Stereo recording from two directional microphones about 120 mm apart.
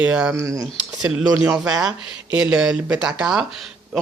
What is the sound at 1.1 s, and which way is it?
Speech, 5° right (ahead or behind).